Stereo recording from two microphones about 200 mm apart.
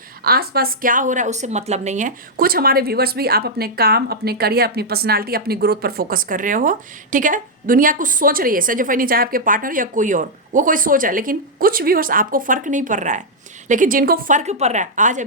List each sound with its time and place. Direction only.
0.3 s a woman's voice: 50° right (ahead or behind)